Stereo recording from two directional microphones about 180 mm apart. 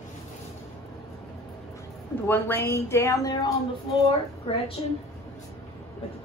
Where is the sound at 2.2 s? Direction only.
10° left (ahead or behind).